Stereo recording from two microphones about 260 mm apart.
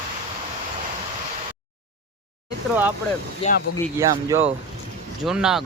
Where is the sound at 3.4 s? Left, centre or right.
Left.